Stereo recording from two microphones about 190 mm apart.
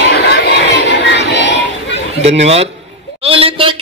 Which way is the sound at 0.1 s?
60° left (ahead or behind).